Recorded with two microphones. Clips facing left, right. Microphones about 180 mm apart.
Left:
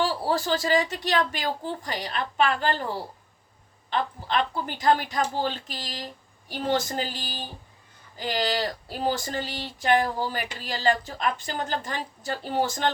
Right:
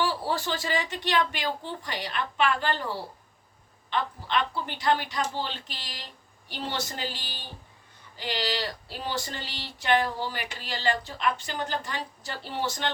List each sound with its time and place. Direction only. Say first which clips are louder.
0.0 s speech: left 3 dB; 40° left (ahead or behind)
3.8 s speech: left 2 dB; 45° left (ahead or behind)